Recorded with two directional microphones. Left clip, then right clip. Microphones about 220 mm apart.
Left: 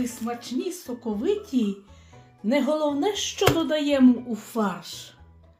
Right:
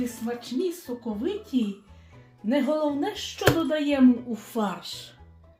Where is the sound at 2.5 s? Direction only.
35° left (ahead or behind).